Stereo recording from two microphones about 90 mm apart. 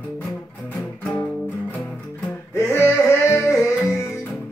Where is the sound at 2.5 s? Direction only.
30° left (ahead or behind).